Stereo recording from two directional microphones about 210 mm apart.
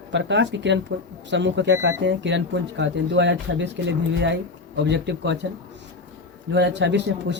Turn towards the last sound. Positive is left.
turn(degrees=-55)  # may be behind; listen again after turning